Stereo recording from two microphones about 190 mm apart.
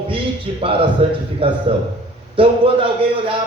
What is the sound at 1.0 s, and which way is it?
Speech, 30° right (ahead or behind).